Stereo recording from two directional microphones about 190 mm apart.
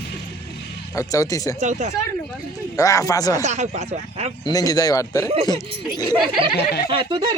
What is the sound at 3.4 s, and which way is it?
Speech, 40° right (ahead or behind).